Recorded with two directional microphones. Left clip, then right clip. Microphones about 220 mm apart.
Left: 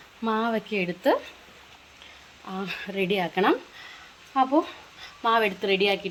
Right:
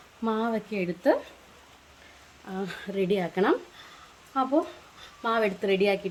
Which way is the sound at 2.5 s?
10° right (ahead or behind).